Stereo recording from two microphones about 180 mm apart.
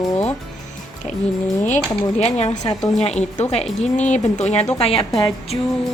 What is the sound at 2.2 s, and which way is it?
A woman's voice, 35° left (ahead or behind).